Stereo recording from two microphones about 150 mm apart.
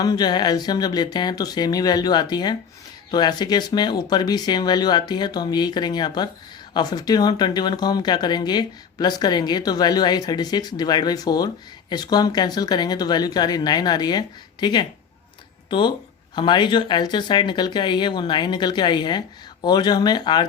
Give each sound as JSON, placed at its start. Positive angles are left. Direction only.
{"t": 0.0, "sound": "speech", "side_deg": 25}
{"t": 16.3, "sound": "speech", "side_deg": 30}